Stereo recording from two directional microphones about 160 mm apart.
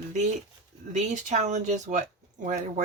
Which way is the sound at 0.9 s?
45° right (ahead or behind).